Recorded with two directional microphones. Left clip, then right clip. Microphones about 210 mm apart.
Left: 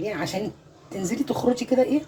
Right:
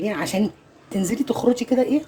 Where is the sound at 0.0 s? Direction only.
55° right (ahead or behind).